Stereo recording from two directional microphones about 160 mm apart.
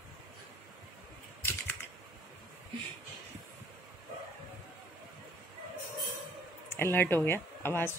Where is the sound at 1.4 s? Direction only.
15° left (ahead or behind).